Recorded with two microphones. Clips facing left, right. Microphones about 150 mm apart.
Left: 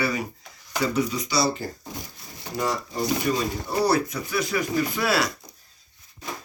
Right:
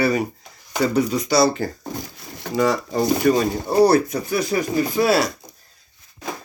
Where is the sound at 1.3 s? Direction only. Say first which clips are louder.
Right 8 dB; 70° right (ahead or behind); by 5.2 s 30° right (ahead or behind).